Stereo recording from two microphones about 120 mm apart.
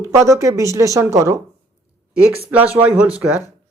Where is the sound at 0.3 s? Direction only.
25° right (ahead or behind).